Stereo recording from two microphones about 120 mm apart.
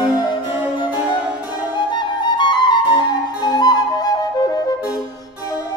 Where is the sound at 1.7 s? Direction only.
40° left (ahead or behind).